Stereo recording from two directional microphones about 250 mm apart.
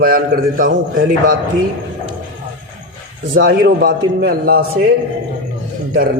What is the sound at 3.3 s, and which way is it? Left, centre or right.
A man's voice, right.